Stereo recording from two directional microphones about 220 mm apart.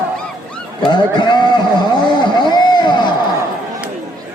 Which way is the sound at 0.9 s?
20° left (ahead or behind).